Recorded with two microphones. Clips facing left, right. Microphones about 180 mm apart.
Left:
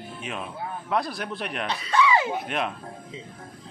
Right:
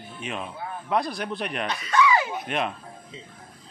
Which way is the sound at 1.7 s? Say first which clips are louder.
Even; 30° left (ahead or behind).